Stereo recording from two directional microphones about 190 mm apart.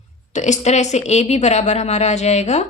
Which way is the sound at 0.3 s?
40° left (ahead or behind).